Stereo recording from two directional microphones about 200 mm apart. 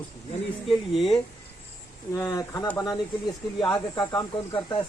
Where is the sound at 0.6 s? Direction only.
Centre (ahead or behind).